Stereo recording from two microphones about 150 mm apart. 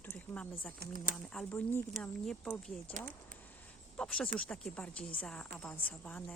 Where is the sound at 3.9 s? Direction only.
5° left (ahead or behind).